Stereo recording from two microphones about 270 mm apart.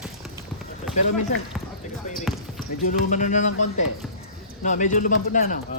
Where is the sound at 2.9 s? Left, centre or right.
Left.